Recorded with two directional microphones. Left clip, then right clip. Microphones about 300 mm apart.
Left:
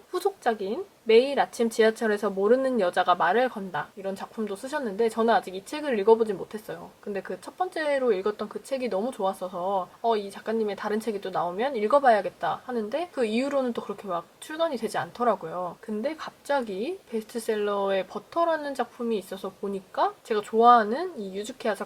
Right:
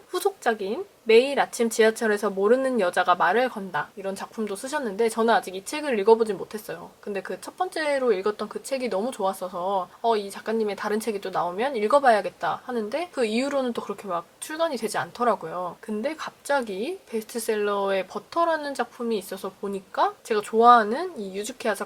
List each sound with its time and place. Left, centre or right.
0.4 s speech: centre
10.1 s speech: centre
13.1 s speech: centre
16.2 s speech: centre
19.4 s speech: centre
20.0 s speech: centre